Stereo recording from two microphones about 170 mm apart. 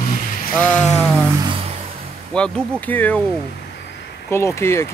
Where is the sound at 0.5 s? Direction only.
10° left (ahead or behind).